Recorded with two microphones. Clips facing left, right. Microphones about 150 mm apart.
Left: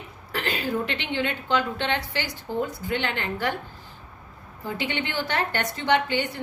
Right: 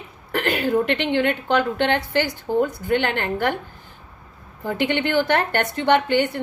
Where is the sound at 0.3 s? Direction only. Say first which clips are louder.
Right 7 dB; 55° right (ahead or behind).